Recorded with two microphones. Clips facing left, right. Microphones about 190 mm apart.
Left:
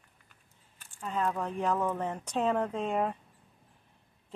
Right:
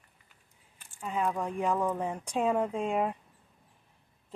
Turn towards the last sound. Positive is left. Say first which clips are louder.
# right 1 dB
turn(degrees=-10)  # may be behind; listen again after turning